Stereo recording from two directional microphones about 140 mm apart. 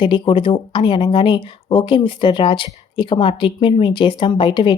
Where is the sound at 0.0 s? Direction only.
35° left (ahead or behind).